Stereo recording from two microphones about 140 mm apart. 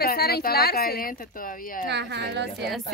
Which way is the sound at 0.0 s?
90° left.